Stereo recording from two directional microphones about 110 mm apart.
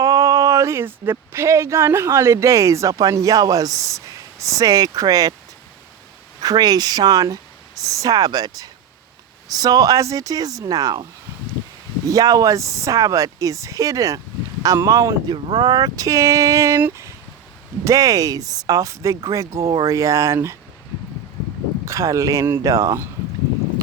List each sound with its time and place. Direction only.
0.0 s a sound: 30° right (ahead or behind)
1.1 s speech: 25° right (ahead or behind)
6.4 s speech: 35° right (ahead or behind)
12.0 s speech: 35° right (ahead or behind)
17.8 s speech: 35° right (ahead or behind)
21.8 s speech: 30° right (ahead or behind)